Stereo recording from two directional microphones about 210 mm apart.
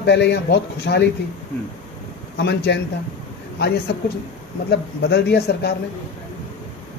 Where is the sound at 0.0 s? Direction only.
55° left (ahead or behind).